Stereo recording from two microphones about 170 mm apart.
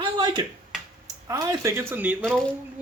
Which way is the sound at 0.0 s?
30° right (ahead or behind).